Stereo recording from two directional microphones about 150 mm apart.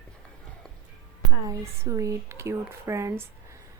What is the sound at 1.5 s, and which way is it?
Speech, 20° right (ahead or behind).